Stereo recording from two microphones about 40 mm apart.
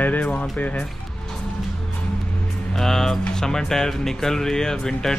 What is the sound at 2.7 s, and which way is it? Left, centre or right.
Speech, centre.